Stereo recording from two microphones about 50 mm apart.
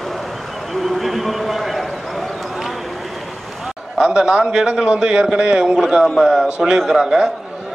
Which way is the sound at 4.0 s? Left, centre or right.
Centre.